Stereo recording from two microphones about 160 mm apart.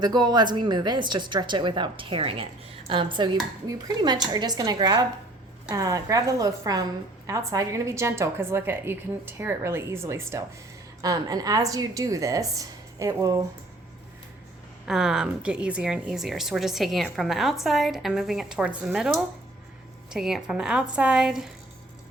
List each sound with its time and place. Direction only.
0.0 s a woman's voice: 25° right (ahead or behind)
14.8 s a woman's voice: 5° right (ahead or behind)